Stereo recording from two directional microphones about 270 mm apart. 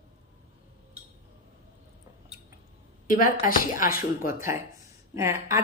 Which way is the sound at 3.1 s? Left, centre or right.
Left.